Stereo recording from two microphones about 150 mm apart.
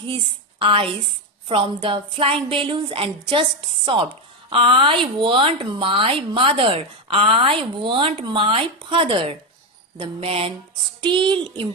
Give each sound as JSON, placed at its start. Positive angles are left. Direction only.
{"t": 0.6, "sound": "speech", "side_deg": -35}